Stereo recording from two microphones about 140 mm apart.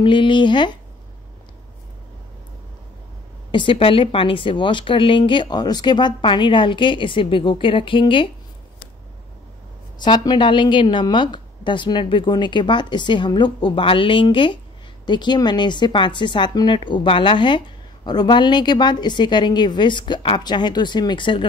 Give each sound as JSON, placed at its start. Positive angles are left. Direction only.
{"t": 0.0, "sound": "speech", "side_deg": 35}
{"t": 3.5, "sound": "speech", "side_deg": 40}
{"t": 10.0, "sound": "speech", "side_deg": 30}